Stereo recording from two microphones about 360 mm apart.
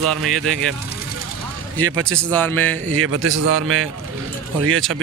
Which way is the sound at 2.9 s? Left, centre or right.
Right.